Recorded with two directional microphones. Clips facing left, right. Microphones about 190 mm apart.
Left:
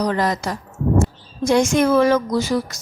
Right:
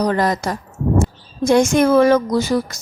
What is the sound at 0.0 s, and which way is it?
A woman's voice, 50° right (ahead or behind).